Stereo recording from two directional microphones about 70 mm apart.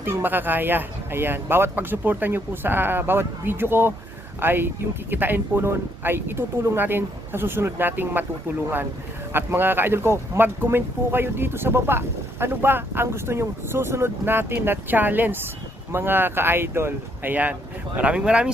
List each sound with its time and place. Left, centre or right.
0.0 s speech: right
9.3 s speech: right
17.3 s speech: right